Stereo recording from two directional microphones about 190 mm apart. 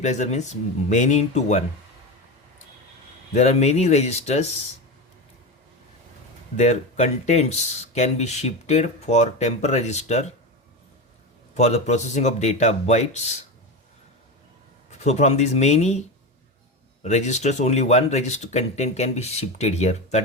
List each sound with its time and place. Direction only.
0.0 s speech: 40° left (ahead or behind)
3.3 s speech: 35° left (ahead or behind)
6.6 s speech: 35° left (ahead or behind)
11.5 s speech: 35° left (ahead or behind)
14.8 s speech: 35° left (ahead or behind)
17.0 s speech: 35° left (ahead or behind)